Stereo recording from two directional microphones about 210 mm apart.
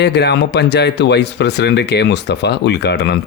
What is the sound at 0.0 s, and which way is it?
Speech, 50° left (ahead or behind).